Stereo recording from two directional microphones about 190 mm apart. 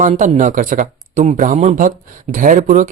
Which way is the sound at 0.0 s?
40° right (ahead or behind).